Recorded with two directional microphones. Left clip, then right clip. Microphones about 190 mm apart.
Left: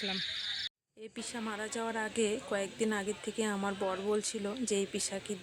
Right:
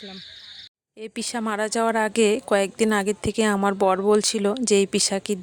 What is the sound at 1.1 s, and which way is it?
Speech, 55° right (ahead or behind).